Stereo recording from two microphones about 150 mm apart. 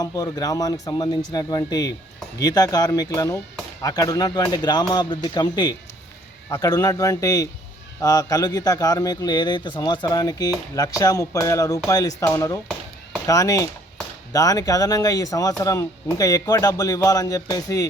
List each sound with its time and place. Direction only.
0.0 s a man's voice: 25° left (ahead or behind)